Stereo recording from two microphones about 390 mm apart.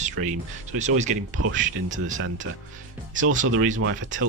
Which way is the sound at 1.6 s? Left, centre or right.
Centre.